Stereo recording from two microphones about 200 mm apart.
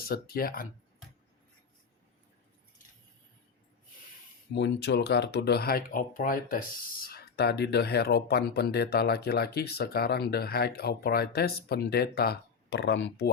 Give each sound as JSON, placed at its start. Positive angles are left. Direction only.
{"t": 0.1, "sound": "speech", "side_deg": 50}
{"t": 4.5, "sound": "speech", "side_deg": 60}